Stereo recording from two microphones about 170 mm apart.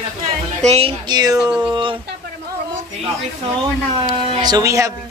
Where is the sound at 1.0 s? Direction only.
25° right (ahead or behind).